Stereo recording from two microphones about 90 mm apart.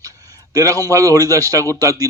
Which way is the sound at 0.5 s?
40° right (ahead or behind).